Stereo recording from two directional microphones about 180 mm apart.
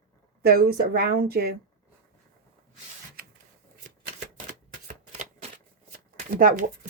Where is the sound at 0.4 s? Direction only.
55° right (ahead or behind).